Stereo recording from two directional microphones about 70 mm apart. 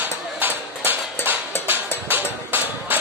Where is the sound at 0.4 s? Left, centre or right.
Right.